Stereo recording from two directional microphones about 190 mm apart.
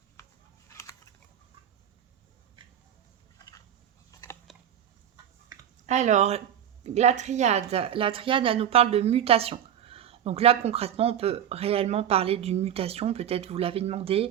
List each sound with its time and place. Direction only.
4.1 s biting: 20° left (ahead or behind)
5.8 s a woman's voice: 40° right (ahead or behind)